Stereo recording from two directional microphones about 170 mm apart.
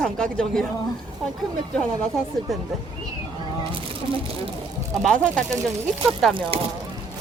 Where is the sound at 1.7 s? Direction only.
Centre (ahead or behind).